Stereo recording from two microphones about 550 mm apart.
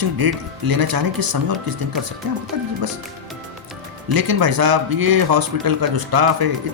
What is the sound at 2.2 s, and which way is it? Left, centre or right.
Speech, right.